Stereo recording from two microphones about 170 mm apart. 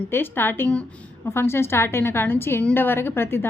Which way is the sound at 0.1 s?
15° left (ahead or behind).